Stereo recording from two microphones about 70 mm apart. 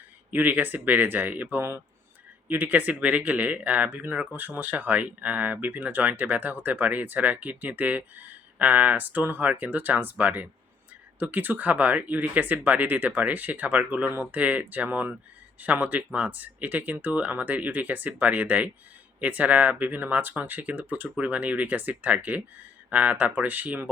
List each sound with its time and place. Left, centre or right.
0.3 s speech: right